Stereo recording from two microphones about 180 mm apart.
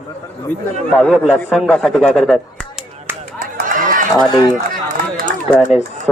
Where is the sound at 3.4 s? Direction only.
50° right (ahead or behind).